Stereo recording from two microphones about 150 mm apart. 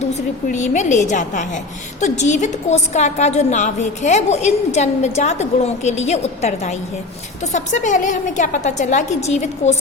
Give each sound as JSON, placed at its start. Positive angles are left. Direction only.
{"t": 0.4, "sound": "a woman's voice", "side_deg": 55}